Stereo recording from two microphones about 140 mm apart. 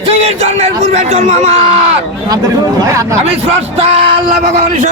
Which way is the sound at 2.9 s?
20° right (ahead or behind).